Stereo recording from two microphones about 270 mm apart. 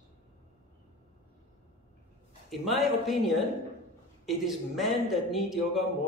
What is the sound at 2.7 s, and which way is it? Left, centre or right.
A man's voice, centre.